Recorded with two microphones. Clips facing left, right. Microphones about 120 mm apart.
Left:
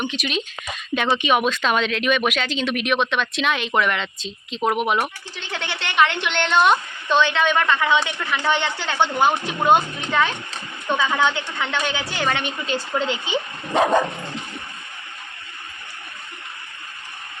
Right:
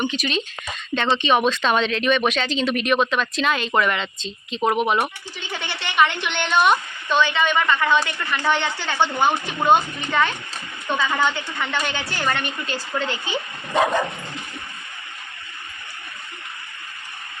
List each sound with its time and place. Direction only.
0.0 s speech: centre (ahead or behind)
8.4 s speech: 5° right (ahead or behind)
9.3 s speech: 5° left (ahead or behind)
12.7 s speech: 20° left (ahead or behind)
13.1 s speech: 5° right (ahead or behind)